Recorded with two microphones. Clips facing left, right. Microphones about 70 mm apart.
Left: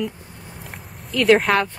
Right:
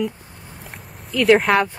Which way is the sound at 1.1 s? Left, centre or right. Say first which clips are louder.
Right 1 dB; centre.